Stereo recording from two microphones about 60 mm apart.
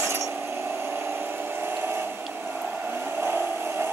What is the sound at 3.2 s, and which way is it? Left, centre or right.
Vehicle, right.